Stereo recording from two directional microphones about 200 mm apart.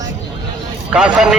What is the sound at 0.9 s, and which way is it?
Speech, 5° right (ahead or behind).